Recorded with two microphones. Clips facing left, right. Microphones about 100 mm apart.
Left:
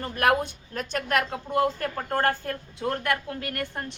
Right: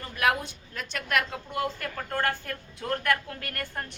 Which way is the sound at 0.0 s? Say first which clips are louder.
Left 4 dB; 45° left (ahead or behind).